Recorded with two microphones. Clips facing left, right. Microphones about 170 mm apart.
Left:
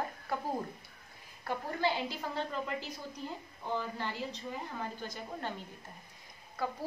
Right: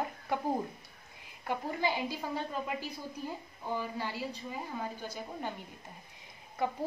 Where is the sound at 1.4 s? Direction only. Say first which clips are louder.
Even; 15° right (ahead or behind).